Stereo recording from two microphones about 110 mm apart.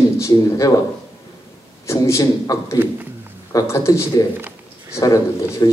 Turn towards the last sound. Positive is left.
turn(degrees=30)  # may be behind; listen again after turning